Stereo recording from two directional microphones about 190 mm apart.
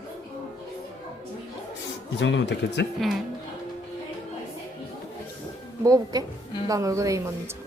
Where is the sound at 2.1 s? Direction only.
70° left (ahead or behind).